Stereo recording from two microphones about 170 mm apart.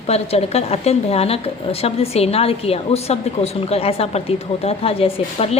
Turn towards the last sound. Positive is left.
turn(degrees=35)  # may be behind; listen again after turning